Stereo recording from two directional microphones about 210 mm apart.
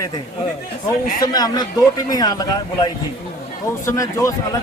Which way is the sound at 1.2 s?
20° left (ahead or behind).